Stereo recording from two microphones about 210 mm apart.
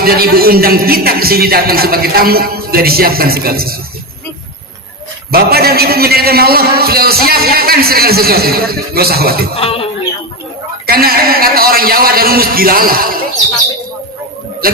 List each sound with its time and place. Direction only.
0.0 s a man's voice: 45° right (ahead or behind)
5.3 s a man's voice: 45° right (ahead or behind)
9.6 s speech: 25° left (ahead or behind)
10.8 s a man's voice: 45° right (ahead or behind)